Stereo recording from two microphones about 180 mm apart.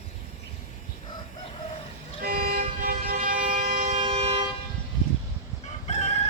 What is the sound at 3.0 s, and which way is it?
Vehicle, 50° right (ahead or behind).